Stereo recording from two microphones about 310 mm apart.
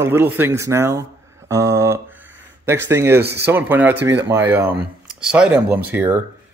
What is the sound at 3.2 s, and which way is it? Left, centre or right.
Speech, right.